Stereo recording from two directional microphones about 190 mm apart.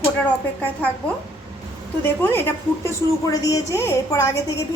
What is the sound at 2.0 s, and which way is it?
A woman's voice, 10° left (ahead or behind).